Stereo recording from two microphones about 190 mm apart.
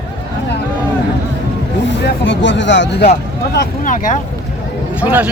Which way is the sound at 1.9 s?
70° left (ahead or behind).